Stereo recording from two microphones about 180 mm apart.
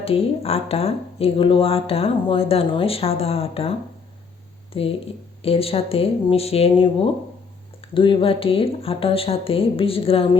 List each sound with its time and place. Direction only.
0.0 s speech: 35° left (ahead or behind)